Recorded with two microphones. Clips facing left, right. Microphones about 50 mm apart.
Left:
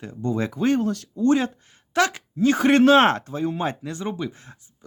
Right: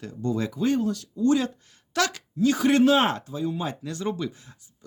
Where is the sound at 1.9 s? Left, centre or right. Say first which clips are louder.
Left 4 dB; left.